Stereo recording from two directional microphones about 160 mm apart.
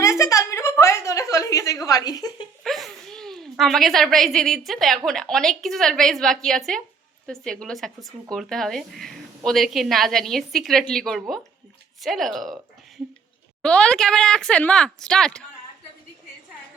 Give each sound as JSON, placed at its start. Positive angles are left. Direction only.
{"t": 0.0, "sound": "a sound", "side_deg": 20}
{"t": 2.6, "sound": "a woman's voice", "side_deg": 0}
{"t": 13.6, "sound": "speech", "side_deg": 5}